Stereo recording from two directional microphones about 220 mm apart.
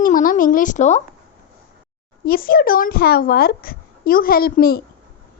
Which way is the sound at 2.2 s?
40° left (ahead or behind).